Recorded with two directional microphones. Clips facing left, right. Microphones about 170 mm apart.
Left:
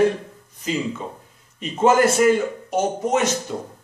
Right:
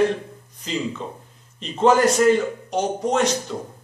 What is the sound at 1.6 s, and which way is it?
A man's voice, 10° left (ahead or behind).